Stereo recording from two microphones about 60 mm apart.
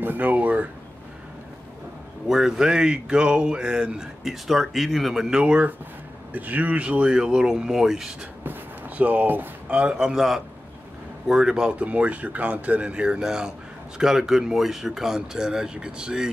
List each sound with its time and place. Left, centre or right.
0.0 s speech: right
2.2 s speech: centre
5.4 s speech: right
8.5 s a sound: right
9.7 s speech: centre
11.7 s speech: right